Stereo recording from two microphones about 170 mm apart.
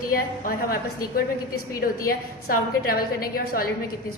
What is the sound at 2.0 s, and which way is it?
A woman's voice, 60° left (ahead or behind).